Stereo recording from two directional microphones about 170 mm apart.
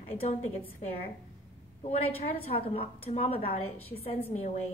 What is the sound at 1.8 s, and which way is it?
A woman's voice, 35° left (ahead or behind).